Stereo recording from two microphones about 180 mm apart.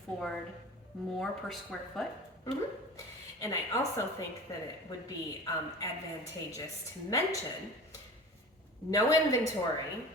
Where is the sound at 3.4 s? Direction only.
15° left (ahead or behind).